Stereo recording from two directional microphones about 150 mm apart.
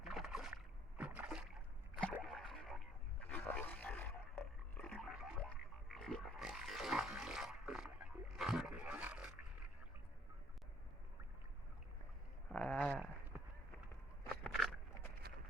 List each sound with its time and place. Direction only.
0.0 s rowboat: centre (ahead or behind)
2.2 s a sound: centre (ahead or behind)
5.4 s pig: 5° left (ahead or behind)
12.5 s a sound: 10° left (ahead or behind)
13.3 s run: 10° right (ahead or behind)
14.4 s walk: 5° left (ahead or behind)